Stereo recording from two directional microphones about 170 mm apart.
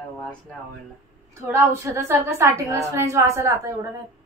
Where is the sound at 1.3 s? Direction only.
15° right (ahead or behind).